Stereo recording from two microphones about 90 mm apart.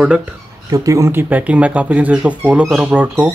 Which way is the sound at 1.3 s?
15° right (ahead or behind).